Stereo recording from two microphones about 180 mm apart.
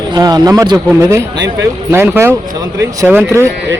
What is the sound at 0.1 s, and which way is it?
Speech, 20° right (ahead or behind).